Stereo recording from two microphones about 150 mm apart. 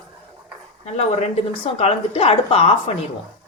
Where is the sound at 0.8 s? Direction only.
50° left (ahead or behind).